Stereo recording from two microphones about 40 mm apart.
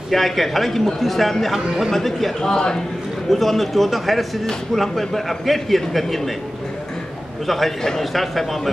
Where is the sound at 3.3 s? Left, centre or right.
Centre.